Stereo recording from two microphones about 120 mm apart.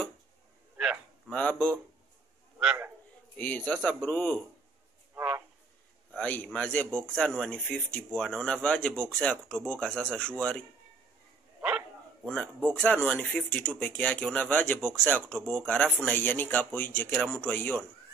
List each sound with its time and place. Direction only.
1.3 s speech: 10° left (ahead or behind)
3.3 s speech: 15° left (ahead or behind)
5.1 s a sound: 15° right (ahead or behind)
6.1 s speech: 15° left (ahead or behind)
11.6 s dog: 10° right (ahead or behind)
12.7 s speech: 10° left (ahead or behind)
16.1 s speech: 15° left (ahead or behind)